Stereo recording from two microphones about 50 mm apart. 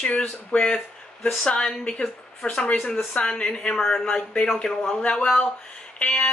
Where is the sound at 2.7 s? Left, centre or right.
Centre.